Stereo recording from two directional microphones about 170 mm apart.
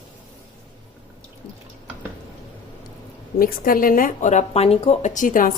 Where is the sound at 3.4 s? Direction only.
60° left (ahead or behind).